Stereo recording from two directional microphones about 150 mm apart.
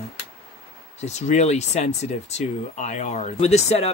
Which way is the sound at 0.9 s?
50° left (ahead or behind).